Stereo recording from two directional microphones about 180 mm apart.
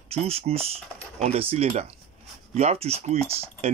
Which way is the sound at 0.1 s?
35° right (ahead or behind).